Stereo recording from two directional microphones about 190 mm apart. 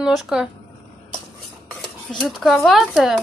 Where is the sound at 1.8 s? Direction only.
5° left (ahead or behind).